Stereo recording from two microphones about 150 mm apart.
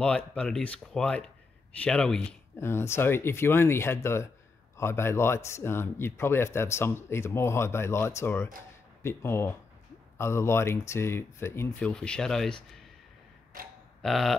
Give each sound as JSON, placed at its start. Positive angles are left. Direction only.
{"t": 0.0, "sound": "speech", "side_deg": 5}
{"t": 2.5, "sound": "speech", "side_deg": 15}
{"t": 11.8, "sound": "speech", "side_deg": 5}
{"t": 14.0, "sound": "speech", "side_deg": 0}